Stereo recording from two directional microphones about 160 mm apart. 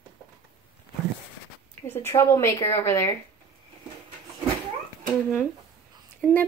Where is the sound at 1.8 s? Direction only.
15° left (ahead or behind).